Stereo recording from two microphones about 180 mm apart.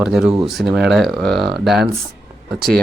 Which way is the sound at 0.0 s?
5° right (ahead or behind).